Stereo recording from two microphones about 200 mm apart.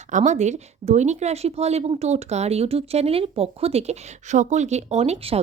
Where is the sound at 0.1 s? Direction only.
35° right (ahead or behind).